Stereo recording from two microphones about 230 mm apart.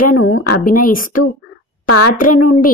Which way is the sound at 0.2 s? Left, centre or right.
Left.